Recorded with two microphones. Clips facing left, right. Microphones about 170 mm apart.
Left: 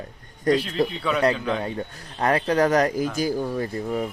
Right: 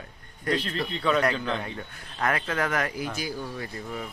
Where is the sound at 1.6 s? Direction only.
35° left (ahead or behind).